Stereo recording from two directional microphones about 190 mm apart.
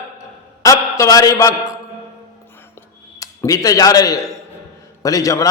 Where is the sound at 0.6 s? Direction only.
15° left (ahead or behind).